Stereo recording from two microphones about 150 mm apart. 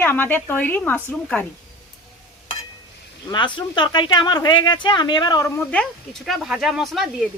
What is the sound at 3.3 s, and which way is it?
Speech, 30° left (ahead or behind).